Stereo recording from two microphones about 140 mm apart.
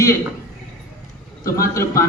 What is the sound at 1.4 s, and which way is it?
Speech, 20° left (ahead or behind).